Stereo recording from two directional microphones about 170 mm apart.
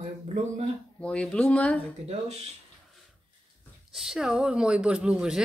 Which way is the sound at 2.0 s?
40° right (ahead or behind).